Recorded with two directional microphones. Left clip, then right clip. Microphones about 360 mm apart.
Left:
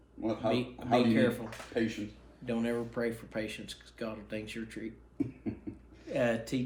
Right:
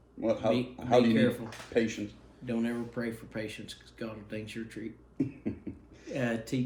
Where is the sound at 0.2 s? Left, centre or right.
Right.